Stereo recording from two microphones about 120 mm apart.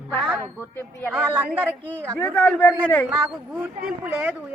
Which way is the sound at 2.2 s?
15° left (ahead or behind).